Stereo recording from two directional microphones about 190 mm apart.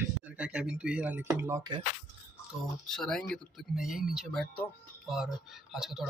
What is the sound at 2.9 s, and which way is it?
Speech, centre (ahead or behind).